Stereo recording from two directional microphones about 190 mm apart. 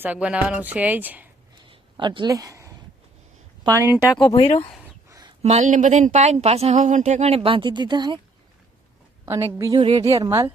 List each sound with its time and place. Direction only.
0.0 s speech: 5° right (ahead or behind)
1.6 s a sound: 25° right (ahead or behind)
3.6 s speech: 15° right (ahead or behind)
4.2 s speech: 25° left (ahead or behind)
5.0 s a sound: 20° right (ahead or behind)
5.4 s speech: 35° right (ahead or behind)
9.2 s speech: 15° right (ahead or behind)